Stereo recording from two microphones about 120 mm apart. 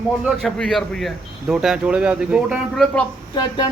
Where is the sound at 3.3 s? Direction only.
40° left (ahead or behind).